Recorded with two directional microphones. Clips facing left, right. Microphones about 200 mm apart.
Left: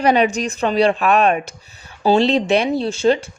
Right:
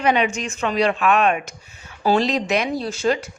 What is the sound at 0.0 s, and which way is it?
A woman's voice, 40° left (ahead or behind).